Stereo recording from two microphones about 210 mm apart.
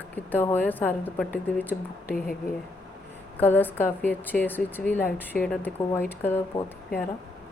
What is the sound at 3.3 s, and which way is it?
A woman's voice, 10° left (ahead or behind).